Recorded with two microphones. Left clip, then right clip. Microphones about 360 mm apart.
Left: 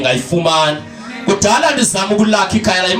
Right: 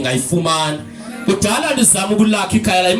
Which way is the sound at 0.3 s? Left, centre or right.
Left.